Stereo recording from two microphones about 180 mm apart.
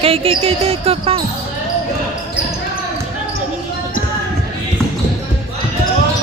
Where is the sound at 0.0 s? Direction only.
30° right (ahead or behind).